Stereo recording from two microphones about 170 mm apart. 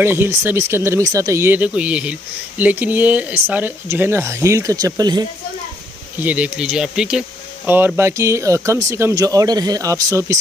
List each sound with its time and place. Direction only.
0.0 s speech: 15° right (ahead or behind)
6.1 s speech: 10° right (ahead or behind)